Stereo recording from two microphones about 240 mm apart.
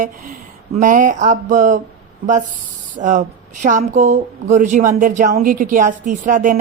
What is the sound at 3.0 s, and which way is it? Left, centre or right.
Speech, right.